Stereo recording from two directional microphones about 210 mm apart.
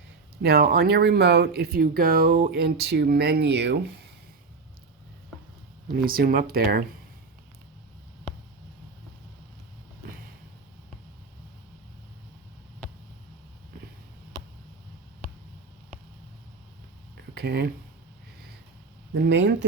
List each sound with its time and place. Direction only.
0.4 s speech: 45° right (ahead or behind)
5.9 s speech: 45° right (ahead or behind)
17.3 s speech: 50° right (ahead or behind)
19.1 s speech: 55° right (ahead or behind)